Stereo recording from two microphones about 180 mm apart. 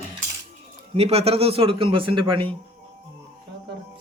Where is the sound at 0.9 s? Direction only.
35° right (ahead or behind).